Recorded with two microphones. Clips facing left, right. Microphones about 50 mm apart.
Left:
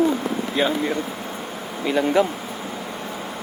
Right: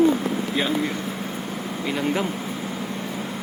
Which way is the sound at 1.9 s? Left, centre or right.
Centre.